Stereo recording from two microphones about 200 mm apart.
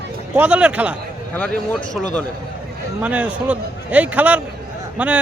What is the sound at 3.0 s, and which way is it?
Speech, 5° right (ahead or behind).